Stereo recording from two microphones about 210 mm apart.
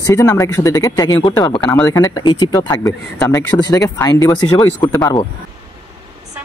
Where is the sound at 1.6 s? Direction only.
10° left (ahead or behind).